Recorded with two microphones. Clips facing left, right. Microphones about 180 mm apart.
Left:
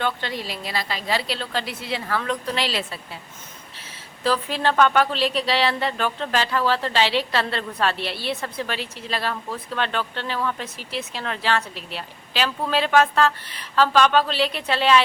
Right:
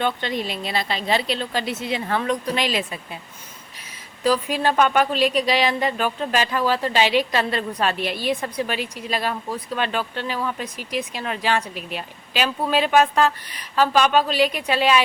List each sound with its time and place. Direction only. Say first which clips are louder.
0.0 s a woman's voice: right 3 dB; 20° right (ahead or behind)